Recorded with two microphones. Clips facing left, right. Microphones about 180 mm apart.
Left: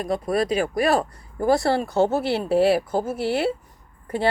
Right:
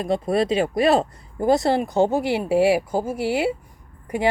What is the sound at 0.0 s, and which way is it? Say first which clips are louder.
Speech: right 2 dB; 25° right (ahead or behind).